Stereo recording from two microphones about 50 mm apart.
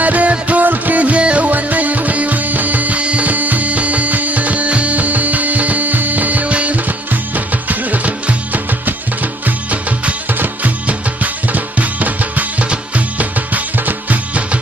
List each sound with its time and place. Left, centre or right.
0.0 s music: right